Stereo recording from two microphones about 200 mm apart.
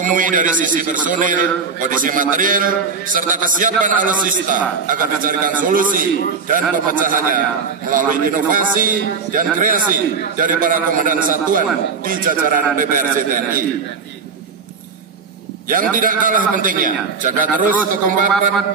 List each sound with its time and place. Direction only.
0.0 s a man's voice: 40° right (ahead or behind)
15.7 s a man's voice: 40° right (ahead or behind)